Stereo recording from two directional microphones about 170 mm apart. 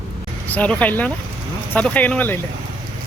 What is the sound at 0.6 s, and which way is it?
Speech, 10° left (ahead or behind).